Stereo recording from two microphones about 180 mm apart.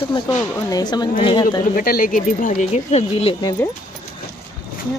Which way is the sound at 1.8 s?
55° left (ahead or behind).